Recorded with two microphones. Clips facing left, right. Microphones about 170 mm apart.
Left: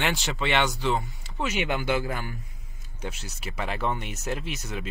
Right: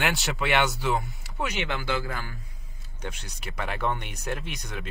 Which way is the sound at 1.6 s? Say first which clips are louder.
Left 5 dB; 15° left (ahead or behind).